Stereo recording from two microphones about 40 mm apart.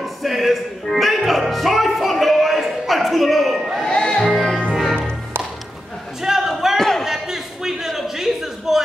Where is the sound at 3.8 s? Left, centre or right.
Centre.